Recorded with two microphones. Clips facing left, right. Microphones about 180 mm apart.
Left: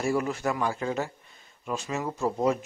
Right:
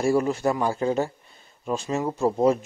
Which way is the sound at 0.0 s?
30° right (ahead or behind).